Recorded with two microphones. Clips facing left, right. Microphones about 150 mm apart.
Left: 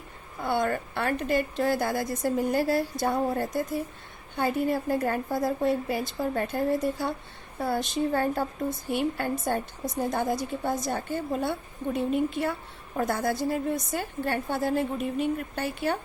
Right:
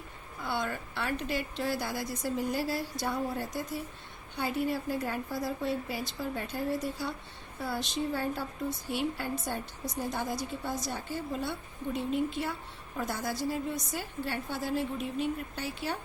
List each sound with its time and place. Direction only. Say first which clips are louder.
0.4 s a woman's voice: left 7 dB; 50° left (ahead or behind)